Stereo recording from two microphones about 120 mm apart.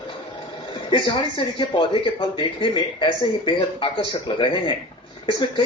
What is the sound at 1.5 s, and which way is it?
Speech, 45° left (ahead or behind).